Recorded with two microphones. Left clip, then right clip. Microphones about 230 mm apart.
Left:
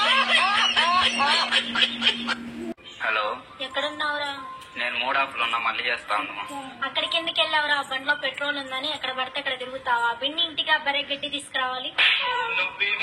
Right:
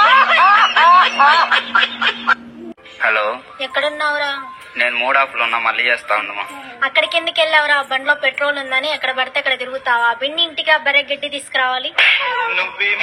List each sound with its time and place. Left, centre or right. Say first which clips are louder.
0.0 s snicker: right 10 dB; right
3.0 s a woman's voice: right 9 dB; right